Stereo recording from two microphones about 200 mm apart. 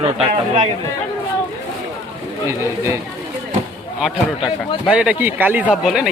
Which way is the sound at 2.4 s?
15° right (ahead or behind).